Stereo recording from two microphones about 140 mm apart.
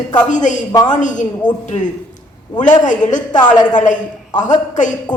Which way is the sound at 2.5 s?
60° left (ahead or behind).